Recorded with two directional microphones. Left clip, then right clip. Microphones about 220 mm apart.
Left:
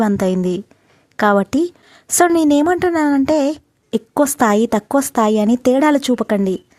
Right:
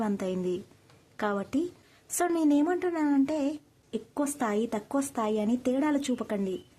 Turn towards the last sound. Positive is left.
turn(degrees=40)  # may be behind; listen again after turning